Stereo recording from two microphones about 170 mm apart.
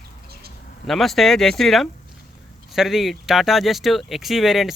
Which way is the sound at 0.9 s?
Centre (ahead or behind).